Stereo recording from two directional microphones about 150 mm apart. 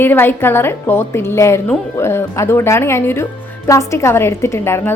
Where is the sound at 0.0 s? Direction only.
15° left (ahead or behind).